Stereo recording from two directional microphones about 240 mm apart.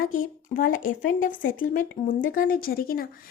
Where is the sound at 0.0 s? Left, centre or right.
Left.